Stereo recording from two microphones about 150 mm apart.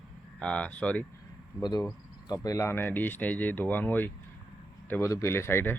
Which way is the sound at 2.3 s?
25° left (ahead or behind).